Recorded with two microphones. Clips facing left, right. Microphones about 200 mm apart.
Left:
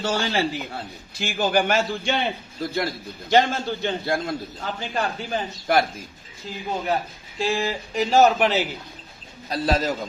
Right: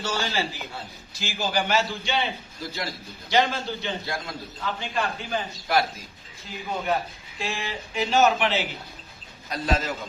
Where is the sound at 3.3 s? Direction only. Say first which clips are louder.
Left 4 dB; 50° left (ahead or behind).